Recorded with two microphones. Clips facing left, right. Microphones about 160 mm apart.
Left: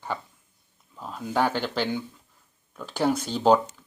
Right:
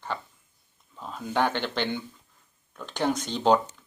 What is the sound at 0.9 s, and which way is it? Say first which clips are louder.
Speech: left 1 dB; 5° left (ahead or behind).